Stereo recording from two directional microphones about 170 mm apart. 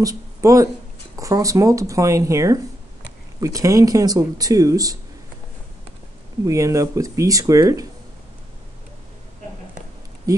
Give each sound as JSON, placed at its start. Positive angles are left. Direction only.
{"t": 0.0, "sound": "speech", "side_deg": -20}
{"t": 6.4, "sound": "speech", "side_deg": -20}
{"t": 10.3, "sound": "speech", "side_deg": -20}